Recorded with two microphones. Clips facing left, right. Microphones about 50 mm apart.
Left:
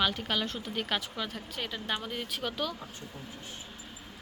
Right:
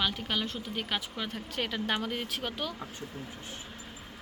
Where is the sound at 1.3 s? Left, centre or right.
Right.